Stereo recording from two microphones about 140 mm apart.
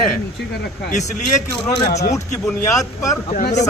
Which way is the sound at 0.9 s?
60° left (ahead or behind).